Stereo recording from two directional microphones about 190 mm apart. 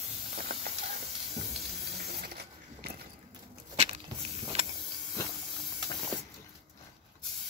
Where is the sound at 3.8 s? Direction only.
35° right (ahead or behind).